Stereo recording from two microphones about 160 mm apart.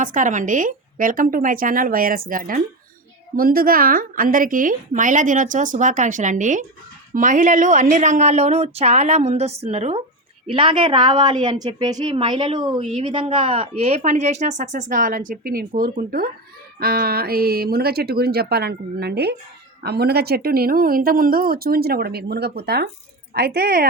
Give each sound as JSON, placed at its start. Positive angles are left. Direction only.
{"t": 0.0, "sound": "a woman's voice", "side_deg": -55}
{"t": 10.5, "sound": "a woman's voice", "side_deg": -30}
{"t": 23.3, "sound": "speech", "side_deg": -70}